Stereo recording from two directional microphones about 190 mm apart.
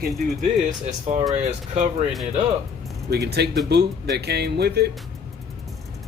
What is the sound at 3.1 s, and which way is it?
Speech, 60° right (ahead or behind).